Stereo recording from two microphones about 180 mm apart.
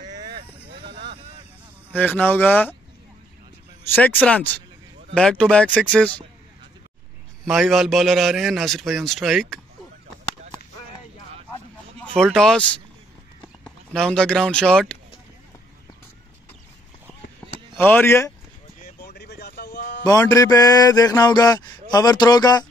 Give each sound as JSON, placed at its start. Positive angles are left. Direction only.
{"t": 0.7, "sound": "a sound", "side_deg": -70}
{"t": 1.9, "sound": "speech", "side_deg": 10}
{"t": 3.9, "sound": "a man's voice", "side_deg": 10}
{"t": 7.4, "sound": "a man's voice", "side_deg": 0}
{"t": 12.1, "sound": "a man's voice", "side_deg": 5}
{"t": 17.7, "sound": "speech", "side_deg": 10}
{"t": 18.9, "sound": "a sound", "side_deg": 65}
{"t": 20.1, "sound": "music", "side_deg": 20}